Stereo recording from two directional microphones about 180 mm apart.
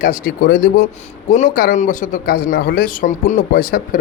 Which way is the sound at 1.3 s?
45° left (ahead or behind).